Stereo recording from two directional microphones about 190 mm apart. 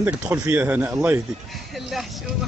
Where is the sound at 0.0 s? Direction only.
10° right (ahead or behind).